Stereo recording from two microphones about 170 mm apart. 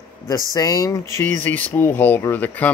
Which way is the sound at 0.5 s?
20° left (ahead or behind).